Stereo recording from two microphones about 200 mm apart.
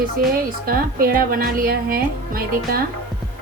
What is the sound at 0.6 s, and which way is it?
A woman's voice, 50° right (ahead or behind).